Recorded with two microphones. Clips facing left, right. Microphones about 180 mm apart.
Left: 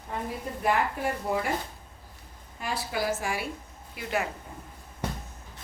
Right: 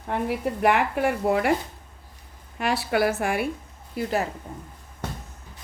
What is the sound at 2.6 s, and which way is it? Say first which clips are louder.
Speech: right 8 dB; 70° right (ahead or behind).